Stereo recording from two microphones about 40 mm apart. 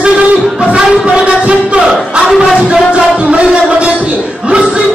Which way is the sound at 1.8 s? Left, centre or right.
Centre.